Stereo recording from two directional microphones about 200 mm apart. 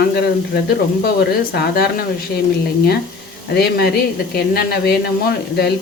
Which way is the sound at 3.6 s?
55° left (ahead or behind).